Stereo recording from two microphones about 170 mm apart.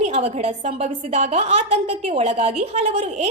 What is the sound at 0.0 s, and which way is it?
A woman's voice, 40° right (ahead or behind).